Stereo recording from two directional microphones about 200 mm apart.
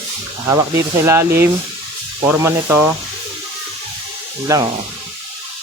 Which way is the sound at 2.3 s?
10° right (ahead or behind).